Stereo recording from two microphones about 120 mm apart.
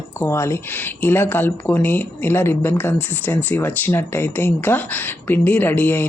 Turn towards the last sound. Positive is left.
turn(degrees=15)  # may be behind; listen again after turning